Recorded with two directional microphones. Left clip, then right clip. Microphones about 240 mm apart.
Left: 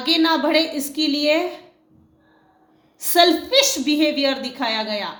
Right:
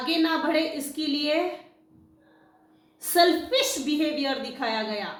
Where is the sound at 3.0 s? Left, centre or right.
Left.